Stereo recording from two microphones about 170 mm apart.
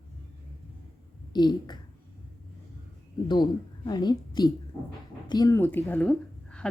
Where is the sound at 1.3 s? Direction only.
25° left (ahead or behind).